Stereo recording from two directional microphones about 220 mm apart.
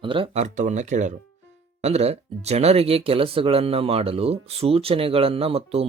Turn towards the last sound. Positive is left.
turn(degrees=-25)  # may be behind; listen again after turning